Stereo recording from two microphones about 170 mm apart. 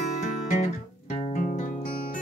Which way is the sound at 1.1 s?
45° left (ahead or behind).